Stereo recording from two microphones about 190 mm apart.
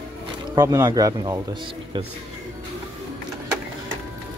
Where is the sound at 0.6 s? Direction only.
20° right (ahead or behind).